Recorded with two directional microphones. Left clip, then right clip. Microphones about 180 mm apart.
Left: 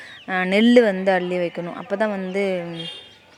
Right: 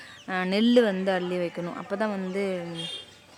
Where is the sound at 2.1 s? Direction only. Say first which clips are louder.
Left 5 dB; centre (ahead or behind).